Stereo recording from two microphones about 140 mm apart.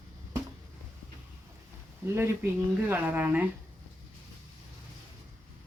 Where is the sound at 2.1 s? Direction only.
15° right (ahead or behind).